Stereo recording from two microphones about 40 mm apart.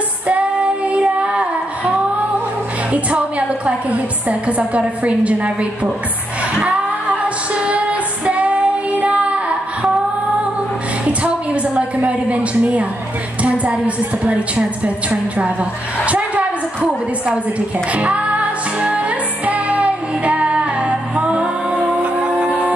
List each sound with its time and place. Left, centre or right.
0.3 s child singing: right
2.9 s a woman's voice: right
6.6 s music: right
11.1 s a sound: right
13.4 s a woman's voice: right
16.1 s a sound: right
17.9 s music: right